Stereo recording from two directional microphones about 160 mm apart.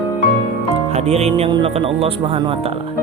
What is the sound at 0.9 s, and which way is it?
Speech, 45° right (ahead or behind).